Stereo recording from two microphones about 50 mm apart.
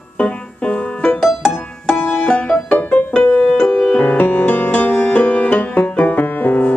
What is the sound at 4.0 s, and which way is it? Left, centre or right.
Music, left.